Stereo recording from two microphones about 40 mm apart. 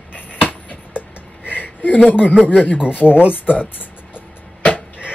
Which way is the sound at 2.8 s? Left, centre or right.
Right.